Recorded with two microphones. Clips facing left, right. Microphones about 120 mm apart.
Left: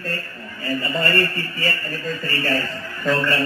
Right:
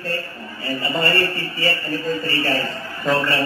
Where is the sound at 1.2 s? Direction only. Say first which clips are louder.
Right 1 dB; 45° left (ahead or behind).